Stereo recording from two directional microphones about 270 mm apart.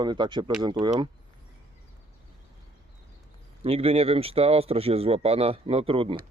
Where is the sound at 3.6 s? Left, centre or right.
Right.